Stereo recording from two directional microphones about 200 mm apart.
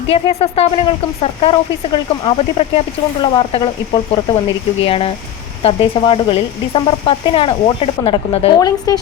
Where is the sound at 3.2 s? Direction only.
25° left (ahead or behind).